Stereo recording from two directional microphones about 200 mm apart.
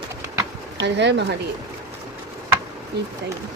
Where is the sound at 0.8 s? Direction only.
60° right (ahead or behind).